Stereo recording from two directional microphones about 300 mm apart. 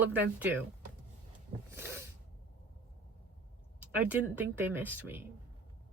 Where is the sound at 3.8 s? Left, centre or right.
Centre.